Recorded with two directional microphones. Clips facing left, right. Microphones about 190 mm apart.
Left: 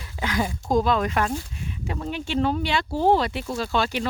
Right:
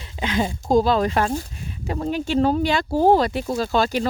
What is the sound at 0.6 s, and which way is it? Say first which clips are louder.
Speech: right 4 dB; 30° right (ahead or behind).